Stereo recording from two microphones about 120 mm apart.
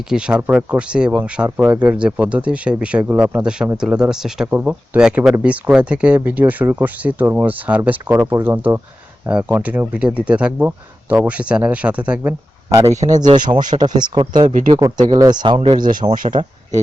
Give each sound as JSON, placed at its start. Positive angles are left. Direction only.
{"t": 0.1, "sound": "speech", "side_deg": -5}
{"t": 1.5, "sound": "speech", "side_deg": -25}
{"t": 1.7, "sound": "speech", "side_deg": -10}
{"t": 12.9, "sound": "speech", "side_deg": -85}
{"t": 13.1, "sound": "speech", "side_deg": -35}
{"t": 14.8, "sound": "speech", "side_deg": -25}
{"t": 15.5, "sound": "speech", "side_deg": -65}